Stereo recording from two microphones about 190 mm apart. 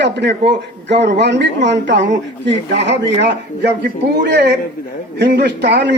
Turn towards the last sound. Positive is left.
turn(degrees=-65)  # may be behind; listen again after turning